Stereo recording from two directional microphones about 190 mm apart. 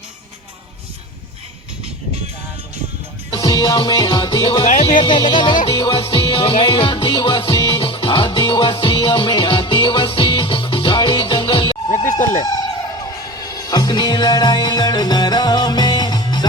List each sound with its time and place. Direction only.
3.2 s music: 25° left (ahead or behind)
4.7 s music: 35° left (ahead or behind)
4.9 s speech: 25° left (ahead or behind)
5.6 s music: 30° left (ahead or behind)
13.4 s music: 20° left (ahead or behind)